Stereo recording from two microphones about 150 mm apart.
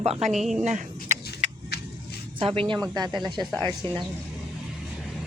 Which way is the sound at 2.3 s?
40° right (ahead or behind).